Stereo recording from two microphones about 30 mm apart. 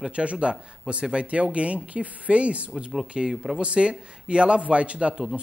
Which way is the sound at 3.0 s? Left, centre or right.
Right.